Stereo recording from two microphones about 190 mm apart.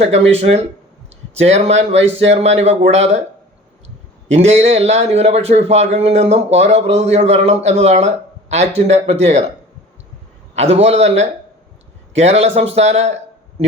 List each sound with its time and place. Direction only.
0.0 s a man's voice: 35° right (ahead or behind)
4.4 s a man's voice: 35° right (ahead or behind)
10.5 s a man's voice: 35° right (ahead or behind)